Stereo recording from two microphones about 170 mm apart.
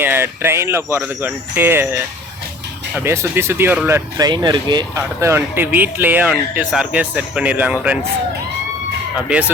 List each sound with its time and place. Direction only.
0.0 s speech: 15° right (ahead or behind)
9.3 s speech: 5° right (ahead or behind)